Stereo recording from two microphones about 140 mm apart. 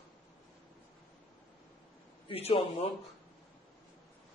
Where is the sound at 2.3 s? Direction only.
45° left (ahead or behind).